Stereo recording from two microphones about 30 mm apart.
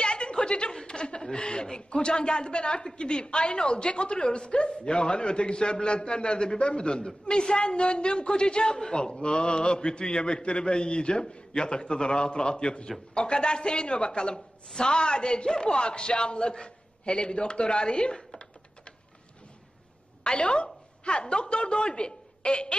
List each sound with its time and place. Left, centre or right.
0.0 s a sound: left
0.8 s a woman's voice: left
20.2 s a woman's voice: left